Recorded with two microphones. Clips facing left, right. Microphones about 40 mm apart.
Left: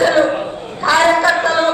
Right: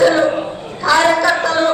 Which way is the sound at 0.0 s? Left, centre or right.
Centre.